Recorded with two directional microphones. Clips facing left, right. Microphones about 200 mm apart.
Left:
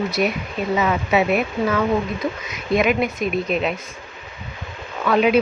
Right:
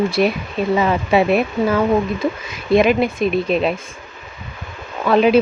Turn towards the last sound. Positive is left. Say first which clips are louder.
# right 3 dB
turn(degrees=-30)  # may be behind; listen again after turning